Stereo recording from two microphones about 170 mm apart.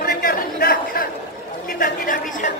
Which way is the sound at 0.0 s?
60° left (ahead or behind).